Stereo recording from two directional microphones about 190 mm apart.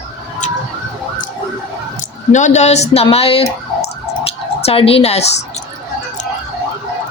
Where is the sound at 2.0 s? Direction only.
40° left (ahead or behind).